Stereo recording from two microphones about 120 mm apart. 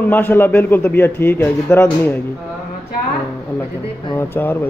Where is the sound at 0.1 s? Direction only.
15° left (ahead or behind).